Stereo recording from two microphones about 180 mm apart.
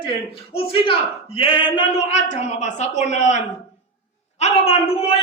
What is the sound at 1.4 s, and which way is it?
Speech, 30° left (ahead or behind).